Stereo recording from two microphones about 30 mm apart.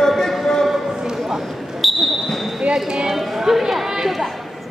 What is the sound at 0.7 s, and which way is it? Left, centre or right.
Basketball bounce, centre.